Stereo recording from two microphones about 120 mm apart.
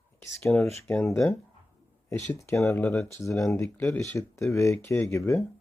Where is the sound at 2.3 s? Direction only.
25° left (ahead or behind).